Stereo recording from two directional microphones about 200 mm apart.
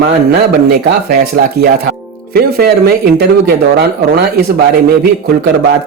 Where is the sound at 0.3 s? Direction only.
55° right (ahead or behind).